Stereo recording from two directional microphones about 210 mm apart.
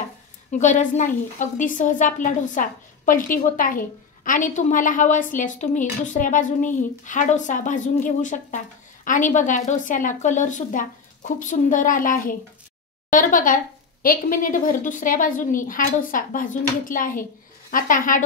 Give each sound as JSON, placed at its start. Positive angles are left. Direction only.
{"t": 0.5, "sound": "a woman's voice", "side_deg": 35}